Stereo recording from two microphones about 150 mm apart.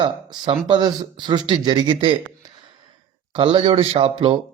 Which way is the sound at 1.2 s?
30° right (ahead or behind).